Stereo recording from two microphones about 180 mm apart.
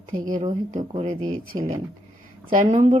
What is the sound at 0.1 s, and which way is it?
A woman's voice, 50° right (ahead or behind).